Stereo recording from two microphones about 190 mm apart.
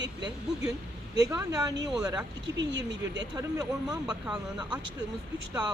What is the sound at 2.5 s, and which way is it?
Speech, 70° right (ahead or behind).